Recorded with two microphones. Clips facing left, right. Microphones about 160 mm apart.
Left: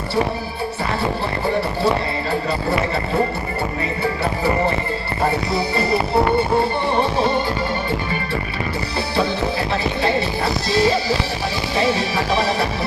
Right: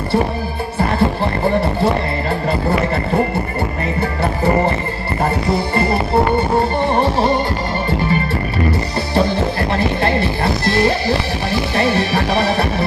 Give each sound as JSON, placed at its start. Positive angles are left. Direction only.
{"t": 9.1, "sound": "music", "side_deg": -55}